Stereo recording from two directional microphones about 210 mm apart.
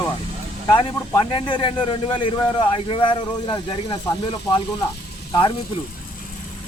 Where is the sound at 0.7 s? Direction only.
20° left (ahead or behind).